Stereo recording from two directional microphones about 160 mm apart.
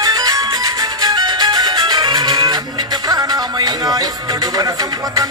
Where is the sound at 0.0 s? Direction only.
25° right (ahead or behind).